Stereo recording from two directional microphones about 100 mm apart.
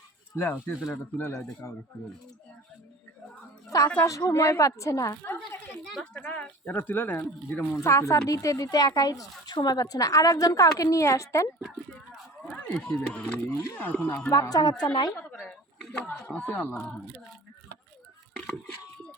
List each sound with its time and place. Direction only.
0.3 s speech: 20° left (ahead or behind)
3.7 s a woman's voice: 35° left (ahead or behind)
5.4 s speech: 5° left (ahead or behind)
6.2 s a woman's voice: 15° left (ahead or behind)
12.6 s speech: 15° left (ahead or behind)
14.3 s a woman's voice: 40° left (ahead or behind)
15.3 s speech: 15° left (ahead or behind)